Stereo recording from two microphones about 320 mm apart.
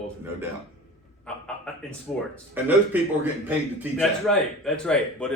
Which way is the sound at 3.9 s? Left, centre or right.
Centre.